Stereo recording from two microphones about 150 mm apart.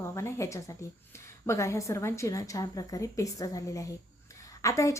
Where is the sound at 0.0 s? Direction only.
20° left (ahead or behind).